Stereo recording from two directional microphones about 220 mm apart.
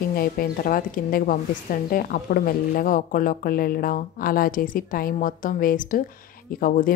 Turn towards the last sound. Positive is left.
turn(degrees=40)  # may be behind; listen again after turning